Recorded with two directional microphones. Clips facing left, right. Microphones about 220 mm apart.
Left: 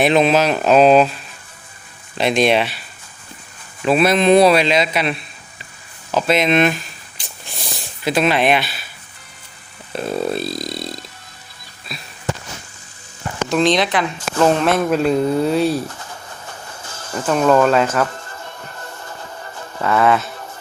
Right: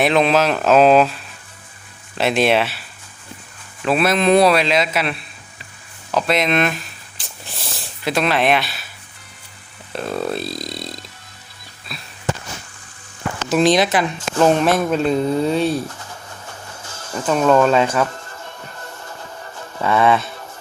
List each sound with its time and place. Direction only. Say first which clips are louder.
0.0 s speech: left 1 dB; centre (ahead or behind)
3.8 s a man's voice: left 2 dB; centre (ahead or behind)
6.1 s a sound: left 2 dB; centre (ahead or behind)
9.9 s speech: left 2 dB; centre (ahead or behind)
11.9 s fireworks: left 2 dB; centre (ahead or behind)
13.5 s speech: right 1 dB; 5° right (ahead or behind)
17.2 s speech: even; centre (ahead or behind)
19.8 s speech: even; centre (ahead or behind)